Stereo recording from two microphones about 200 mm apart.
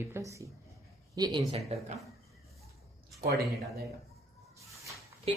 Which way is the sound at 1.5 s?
30° right (ahead or behind).